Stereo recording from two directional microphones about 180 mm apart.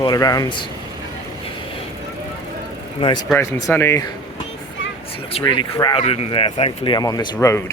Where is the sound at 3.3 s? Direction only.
10° left (ahead or behind).